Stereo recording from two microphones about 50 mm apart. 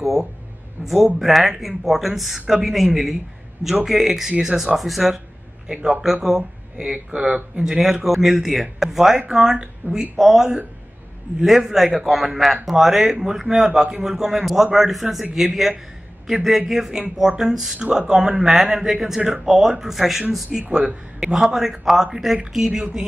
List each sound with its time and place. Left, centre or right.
0.8 s a man's voice: centre
4.7 s speech: centre
5.7 s a man's voice: centre
7.7 s a man's voice: centre